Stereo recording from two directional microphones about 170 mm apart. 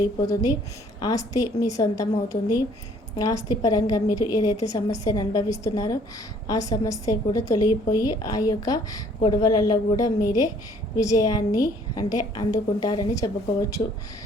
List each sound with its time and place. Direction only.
0.0 s a woman's voice: 20° left (ahead or behind)